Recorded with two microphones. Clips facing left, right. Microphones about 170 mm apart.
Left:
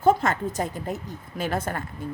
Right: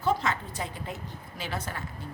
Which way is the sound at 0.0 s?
50° left (ahead or behind).